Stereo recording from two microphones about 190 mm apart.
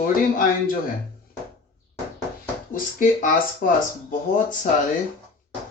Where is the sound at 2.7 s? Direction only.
45° left (ahead or behind).